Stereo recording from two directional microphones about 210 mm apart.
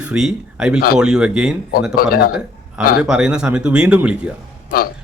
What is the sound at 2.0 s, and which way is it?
Speech, 45° left (ahead or behind).